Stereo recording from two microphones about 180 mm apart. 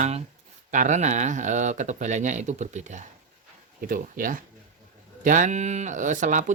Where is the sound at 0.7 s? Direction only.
45° right (ahead or behind).